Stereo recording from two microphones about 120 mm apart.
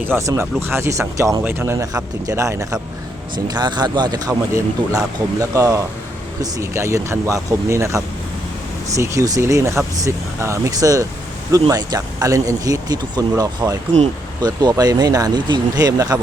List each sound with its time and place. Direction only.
0.2 s speech: 25° right (ahead or behind)
3.3 s speech: 40° right (ahead or behind)